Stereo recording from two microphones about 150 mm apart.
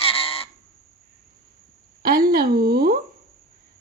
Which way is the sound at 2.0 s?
80° right.